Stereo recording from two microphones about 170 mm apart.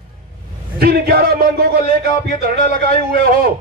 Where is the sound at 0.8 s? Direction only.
65° right (ahead or behind).